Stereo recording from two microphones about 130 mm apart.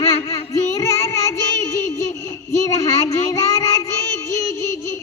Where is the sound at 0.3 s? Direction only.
25° left (ahead or behind).